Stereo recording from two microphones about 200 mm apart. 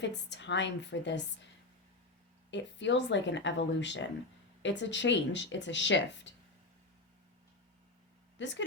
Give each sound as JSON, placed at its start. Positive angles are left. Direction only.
{"t": 0.0, "sound": "speech", "side_deg": 60}
{"t": 2.5, "sound": "speech", "side_deg": 60}
{"t": 8.4, "sound": "a woman's voice", "side_deg": 65}